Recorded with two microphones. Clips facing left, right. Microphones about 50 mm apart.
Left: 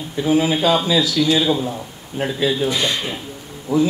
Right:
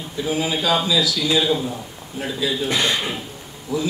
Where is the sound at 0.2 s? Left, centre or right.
Left.